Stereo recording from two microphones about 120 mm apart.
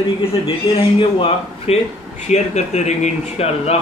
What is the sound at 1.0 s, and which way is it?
Speech, 50° left (ahead or behind).